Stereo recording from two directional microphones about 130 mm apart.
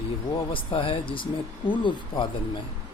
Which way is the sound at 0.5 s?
40° left (ahead or behind).